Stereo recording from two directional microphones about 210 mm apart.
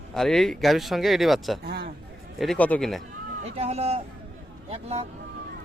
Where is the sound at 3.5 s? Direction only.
30° right (ahead or behind).